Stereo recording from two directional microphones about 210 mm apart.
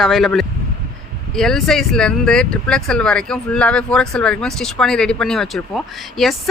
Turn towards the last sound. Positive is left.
turn(degrees=0)  # may be behind; listen again after turning